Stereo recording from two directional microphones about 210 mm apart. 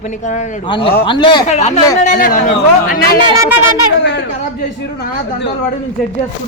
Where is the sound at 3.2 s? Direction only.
15° right (ahead or behind).